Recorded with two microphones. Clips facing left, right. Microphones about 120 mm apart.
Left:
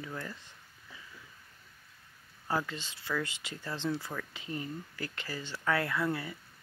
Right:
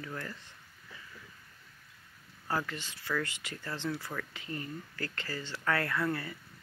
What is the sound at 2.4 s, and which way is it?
Speech, 15° left (ahead or behind).